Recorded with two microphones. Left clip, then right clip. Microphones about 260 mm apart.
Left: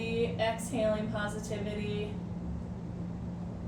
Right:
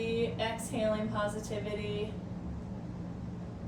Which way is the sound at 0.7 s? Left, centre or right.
Centre.